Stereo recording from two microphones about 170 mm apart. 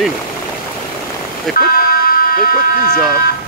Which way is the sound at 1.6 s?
60° left (ahead or behind).